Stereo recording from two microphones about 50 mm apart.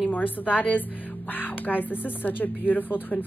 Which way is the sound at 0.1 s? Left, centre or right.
Left.